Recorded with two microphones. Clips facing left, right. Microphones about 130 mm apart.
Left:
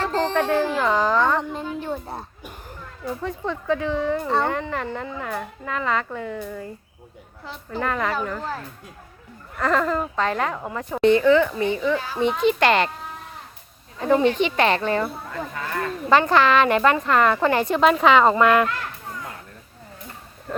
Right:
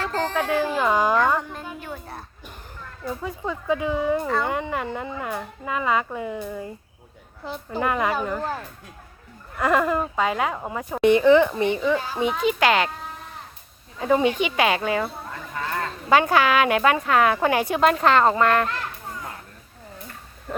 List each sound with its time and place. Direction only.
0.1 s music: 25° left (ahead or behind)
0.3 s speech: 5° right (ahead or behind)
1.4 s a child's voice: 20° left (ahead or behind)
3.0 s speech: 5° right (ahead or behind)
12.3 s a woman's voice: 5° right (ahead or behind)
14.0 s speech: 10° right (ahead or behind)
16.0 s a woman's voice: 5° right (ahead or behind)